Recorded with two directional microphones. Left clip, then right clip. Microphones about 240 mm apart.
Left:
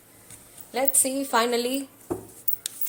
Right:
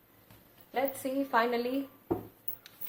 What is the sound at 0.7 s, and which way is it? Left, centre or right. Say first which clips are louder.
A woman's voice: left 6 dB; left.